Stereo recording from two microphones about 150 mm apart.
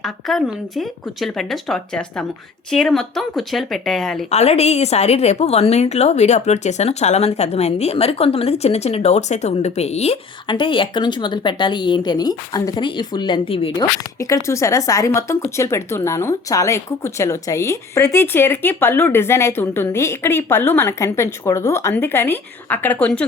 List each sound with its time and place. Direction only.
0.0 s speech: centre (ahead or behind)
4.3 s a woman's voice: 45° left (ahead or behind)
13.7 s speech: 20° left (ahead or behind)